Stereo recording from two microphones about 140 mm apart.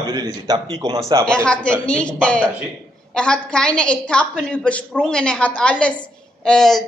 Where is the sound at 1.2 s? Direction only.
5° left (ahead or behind).